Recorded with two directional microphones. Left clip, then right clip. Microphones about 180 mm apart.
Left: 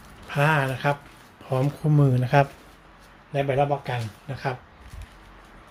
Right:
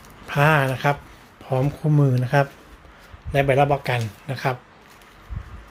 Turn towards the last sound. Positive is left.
turn(degrees=-25)  # may be behind; listen again after turning